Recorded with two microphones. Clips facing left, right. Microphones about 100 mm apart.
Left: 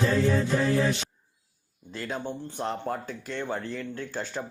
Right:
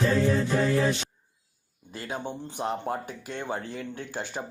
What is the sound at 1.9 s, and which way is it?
Speech, 10° right (ahead or behind).